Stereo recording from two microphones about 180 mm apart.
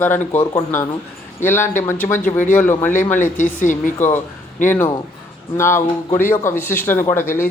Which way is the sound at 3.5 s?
45° left (ahead or behind).